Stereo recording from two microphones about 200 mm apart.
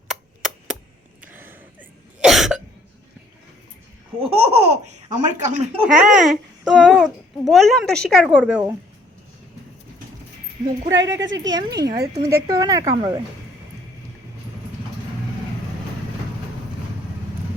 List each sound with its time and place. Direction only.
0.1 s a sound: centre (ahead or behind)
1.2 s gasp: 10° right (ahead or behind)
2.2 s cough: centre (ahead or behind)
4.2 s baby laughter: 35° right (ahead or behind)
5.8 s a child's voice: 5° right (ahead or behind)
10.8 s a woman's voice: 15° right (ahead or behind)